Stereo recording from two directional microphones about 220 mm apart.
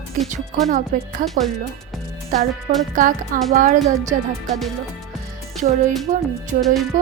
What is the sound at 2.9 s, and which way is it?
Speech, 40° right (ahead or behind).